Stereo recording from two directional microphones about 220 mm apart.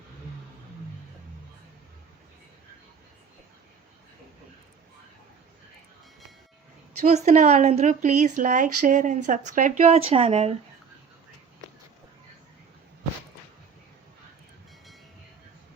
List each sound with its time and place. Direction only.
7.0 s speech: 30° right (ahead or behind)